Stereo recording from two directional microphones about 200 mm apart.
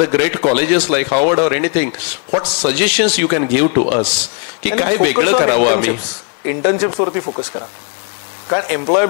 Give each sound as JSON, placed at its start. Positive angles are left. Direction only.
{"t": 0.0, "sound": "a man's voice", "side_deg": -15}
{"t": 8.5, "sound": "speech", "side_deg": -20}